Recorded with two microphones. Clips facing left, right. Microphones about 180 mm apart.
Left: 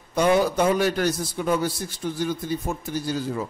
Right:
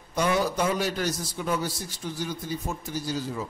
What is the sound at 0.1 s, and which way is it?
A man's voice, 60° left (ahead or behind).